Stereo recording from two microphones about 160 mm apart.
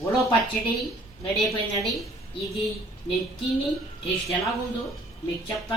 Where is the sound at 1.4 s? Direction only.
Centre (ahead or behind).